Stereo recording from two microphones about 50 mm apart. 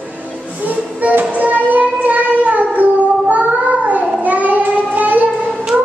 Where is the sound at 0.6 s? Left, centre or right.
Right.